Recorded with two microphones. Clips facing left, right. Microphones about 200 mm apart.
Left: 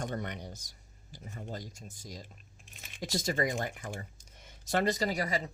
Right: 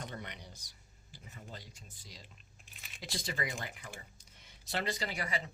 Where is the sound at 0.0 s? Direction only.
50° left (ahead or behind).